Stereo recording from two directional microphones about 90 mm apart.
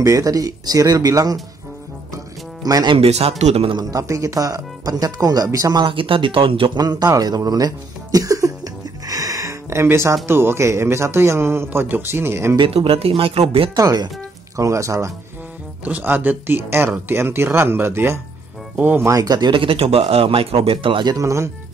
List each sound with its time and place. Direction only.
0.0 s speech: 40° right (ahead or behind)
2.6 s speech: 45° right (ahead or behind)
2.9 s speech: 85° right
3.9 s speech: 40° right (ahead or behind)
5.9 s speech: 80° right
6.8 s a sound: 50° right (ahead or behind); by 10.1 s 30° right (ahead or behind)
10.2 s speech: 25° right (ahead or behind)
12.5 s speech: 85° right
13.7 s speech: 45° right (ahead or behind)
15.8 s speech: 20° right (ahead or behind)
19.0 s speech: 45° right (ahead or behind)
19.5 s speech: 85° right
21.1 s speech: 35° right (ahead or behind)